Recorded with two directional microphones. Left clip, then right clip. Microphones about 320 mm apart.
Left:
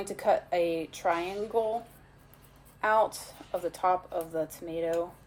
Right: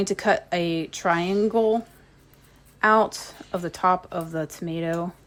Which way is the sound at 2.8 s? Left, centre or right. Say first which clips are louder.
Right 6 dB; right.